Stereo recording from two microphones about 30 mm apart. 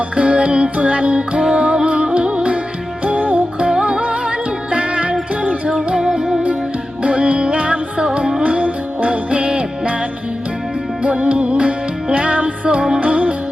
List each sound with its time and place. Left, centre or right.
0.2 s music: right
3.2 s music: right
3.6 s music: right
4.0 s music: right
6.0 s music: right
7.0 s music: right
11.1 s music: right